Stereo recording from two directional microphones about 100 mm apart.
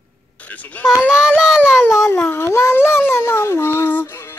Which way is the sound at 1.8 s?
25° left (ahead or behind).